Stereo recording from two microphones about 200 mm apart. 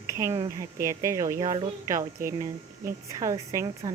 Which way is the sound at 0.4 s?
15° right (ahead or behind).